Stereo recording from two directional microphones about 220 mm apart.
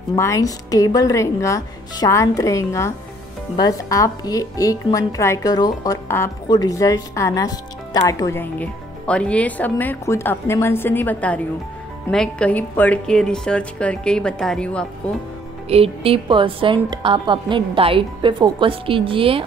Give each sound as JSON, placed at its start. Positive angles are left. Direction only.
{"t": 0.1, "sound": "a woman's voice", "side_deg": 15}
{"t": 15.7, "sound": "a woman's voice", "side_deg": -25}